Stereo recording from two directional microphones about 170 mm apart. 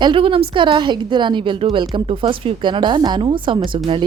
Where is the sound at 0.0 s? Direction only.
30° right (ahead or behind).